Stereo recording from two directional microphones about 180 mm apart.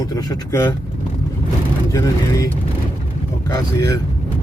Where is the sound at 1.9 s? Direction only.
20° left (ahead or behind).